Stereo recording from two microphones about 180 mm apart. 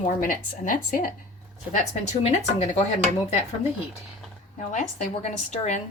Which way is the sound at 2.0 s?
40° left (ahead or behind).